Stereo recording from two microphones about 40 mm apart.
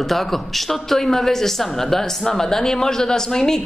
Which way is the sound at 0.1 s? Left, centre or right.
Centre.